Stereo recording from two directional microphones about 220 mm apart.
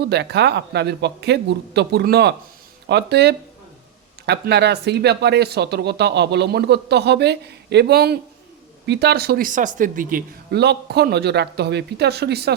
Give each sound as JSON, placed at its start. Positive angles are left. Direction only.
{"t": 0.0, "sound": "speech", "side_deg": -50}